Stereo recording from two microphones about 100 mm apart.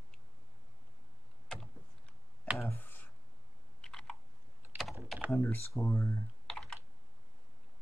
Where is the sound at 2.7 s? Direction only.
20° left (ahead or behind).